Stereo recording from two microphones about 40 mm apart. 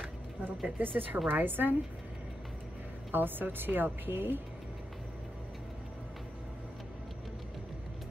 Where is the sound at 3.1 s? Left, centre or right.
Right.